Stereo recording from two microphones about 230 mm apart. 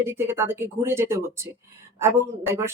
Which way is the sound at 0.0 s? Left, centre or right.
Centre.